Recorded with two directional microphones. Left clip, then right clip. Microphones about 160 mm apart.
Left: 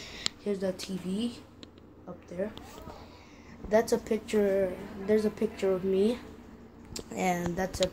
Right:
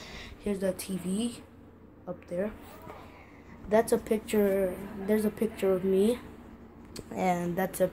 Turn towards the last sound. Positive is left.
turn(degrees=-15)  # may be behind; listen again after turning